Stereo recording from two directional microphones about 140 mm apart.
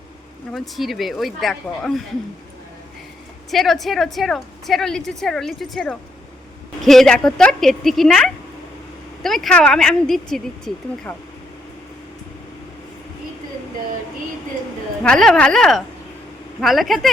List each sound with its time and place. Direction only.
0.5 s a woman's voice: centre (ahead or behind)
3.5 s a woman's voice: centre (ahead or behind)
15.0 s a woman's voice: 5° left (ahead or behind)